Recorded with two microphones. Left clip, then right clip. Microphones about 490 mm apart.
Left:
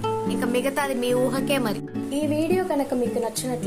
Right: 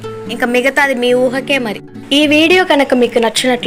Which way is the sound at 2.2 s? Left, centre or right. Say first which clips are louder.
Right 14 dB; left.